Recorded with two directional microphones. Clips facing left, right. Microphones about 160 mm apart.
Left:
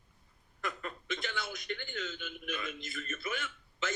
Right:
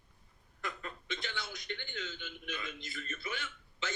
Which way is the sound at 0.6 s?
50° left (ahead or behind).